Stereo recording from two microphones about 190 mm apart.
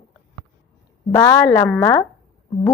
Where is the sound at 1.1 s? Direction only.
20° left (ahead or behind).